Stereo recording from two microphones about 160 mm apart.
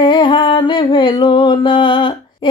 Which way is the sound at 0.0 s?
30° left (ahead or behind).